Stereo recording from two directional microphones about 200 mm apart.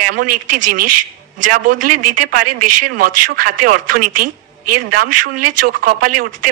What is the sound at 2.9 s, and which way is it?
A woman's voice, 45° right (ahead or behind).